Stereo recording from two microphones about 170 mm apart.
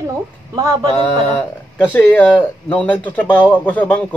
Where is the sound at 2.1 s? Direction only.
10° left (ahead or behind).